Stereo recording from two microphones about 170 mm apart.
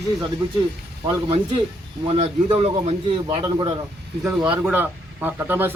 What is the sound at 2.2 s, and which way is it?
A man's voice, 35° right (ahead or behind).